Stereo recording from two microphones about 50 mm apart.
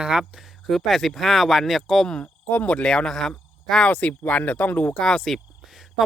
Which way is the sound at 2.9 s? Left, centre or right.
Centre.